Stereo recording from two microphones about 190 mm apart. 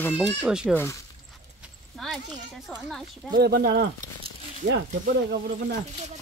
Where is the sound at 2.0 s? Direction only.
Centre (ahead or behind).